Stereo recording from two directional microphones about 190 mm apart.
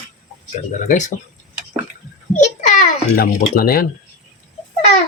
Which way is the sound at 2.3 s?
40° left (ahead or behind).